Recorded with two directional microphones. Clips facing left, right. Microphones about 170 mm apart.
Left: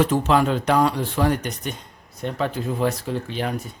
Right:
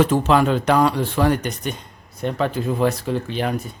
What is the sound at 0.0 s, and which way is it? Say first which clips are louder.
Speech: right 2 dB; 75° right (ahead or behind).